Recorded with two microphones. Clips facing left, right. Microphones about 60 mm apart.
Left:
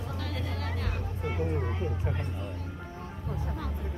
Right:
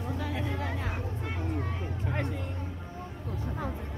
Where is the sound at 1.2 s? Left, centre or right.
Centre.